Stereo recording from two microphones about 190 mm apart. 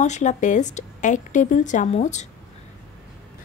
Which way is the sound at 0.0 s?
40° left (ahead or behind).